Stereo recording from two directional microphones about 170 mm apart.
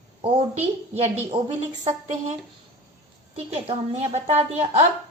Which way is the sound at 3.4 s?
35° right (ahead or behind).